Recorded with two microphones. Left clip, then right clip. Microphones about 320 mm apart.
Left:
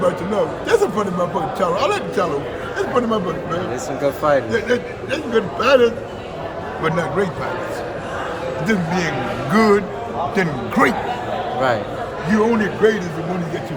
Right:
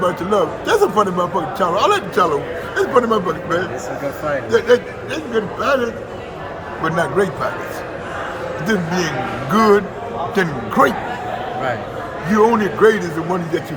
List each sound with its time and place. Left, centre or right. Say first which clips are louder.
0.0 s a man's voice: right 2 dB; centre
8.6 s a man's voice: right 2 dB; centre
12.3 s a man's voice: right 4 dB; centre